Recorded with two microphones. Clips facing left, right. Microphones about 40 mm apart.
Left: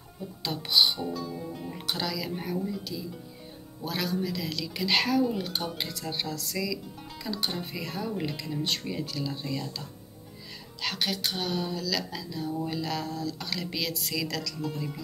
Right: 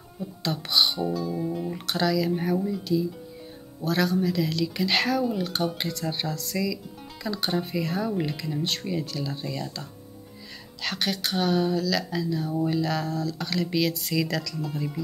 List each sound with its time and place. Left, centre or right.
0.4 s a woman's voice: centre
6.0 s a woman's voice: centre